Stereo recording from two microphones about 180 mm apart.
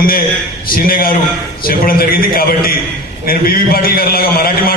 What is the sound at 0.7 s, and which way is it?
A man's voice, 55° left (ahead or behind).